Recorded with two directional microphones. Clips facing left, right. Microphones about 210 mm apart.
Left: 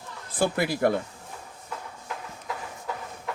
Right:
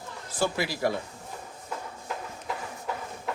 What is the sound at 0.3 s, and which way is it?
Speech, 55° left (ahead or behind).